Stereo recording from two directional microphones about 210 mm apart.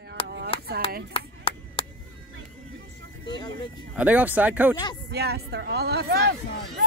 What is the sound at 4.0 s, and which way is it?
Speech, 5° right (ahead or behind).